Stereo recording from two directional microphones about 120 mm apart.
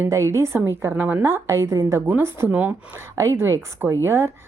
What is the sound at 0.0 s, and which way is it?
A woman's voice, 25° right (ahead or behind).